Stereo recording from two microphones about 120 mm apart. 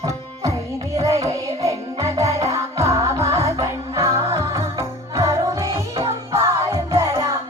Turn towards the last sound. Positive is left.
turn(degrees=-25)  # may be behind; listen again after turning